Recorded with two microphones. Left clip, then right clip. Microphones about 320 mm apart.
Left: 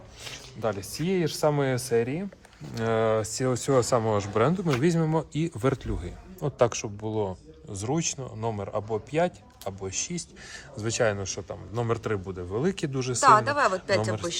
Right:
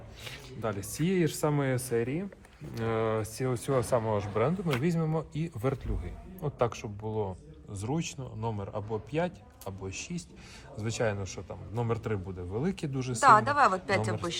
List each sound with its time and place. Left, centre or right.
0.6 s speech: left
13.1 s a woman's voice: centre